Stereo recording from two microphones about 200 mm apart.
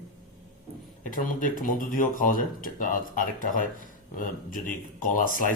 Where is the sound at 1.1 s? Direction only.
40° left (ahead or behind).